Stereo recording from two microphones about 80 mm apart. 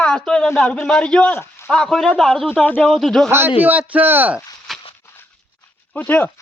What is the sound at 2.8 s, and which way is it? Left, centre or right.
Speech, centre.